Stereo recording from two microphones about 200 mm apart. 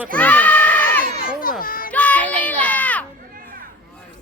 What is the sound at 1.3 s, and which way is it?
Children playing, 45° left (ahead or behind).